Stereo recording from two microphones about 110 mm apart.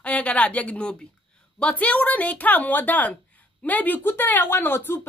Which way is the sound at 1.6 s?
10° left (ahead or behind).